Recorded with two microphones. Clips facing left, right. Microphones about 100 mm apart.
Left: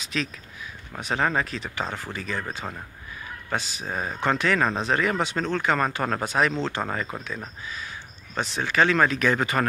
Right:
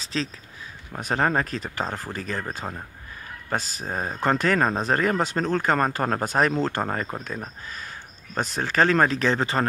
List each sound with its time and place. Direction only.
0.0 s speech: 35° right (ahead or behind)